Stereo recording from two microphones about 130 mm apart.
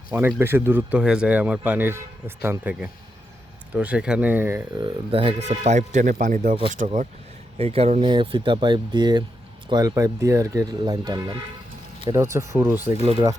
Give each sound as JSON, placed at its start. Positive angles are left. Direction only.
{"t": 0.1, "sound": "speech", "side_deg": -15}
{"t": 4.8, "sound": "speech", "side_deg": -40}
{"t": 5.4, "sound": "speech", "side_deg": -65}
{"t": 7.6, "sound": "speech", "side_deg": -50}
{"t": 8.0, "sound": "speech", "side_deg": -40}